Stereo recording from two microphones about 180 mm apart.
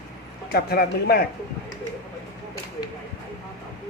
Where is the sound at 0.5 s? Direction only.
60° left (ahead or behind).